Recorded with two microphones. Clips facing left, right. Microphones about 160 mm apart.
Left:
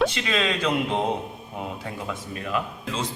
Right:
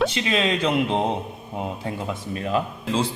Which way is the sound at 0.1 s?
25° right (ahead or behind).